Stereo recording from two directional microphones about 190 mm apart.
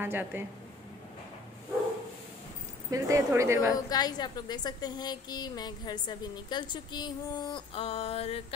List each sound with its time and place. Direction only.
0.0 s speech: 10° right (ahead or behind)
2.9 s speech: 15° right (ahead or behind)
3.7 s a woman's voice: 20° left (ahead or behind)